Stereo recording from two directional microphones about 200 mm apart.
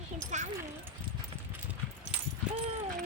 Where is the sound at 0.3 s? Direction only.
35° right (ahead or behind).